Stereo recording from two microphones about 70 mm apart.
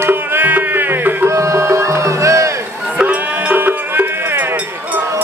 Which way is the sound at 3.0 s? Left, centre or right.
Right.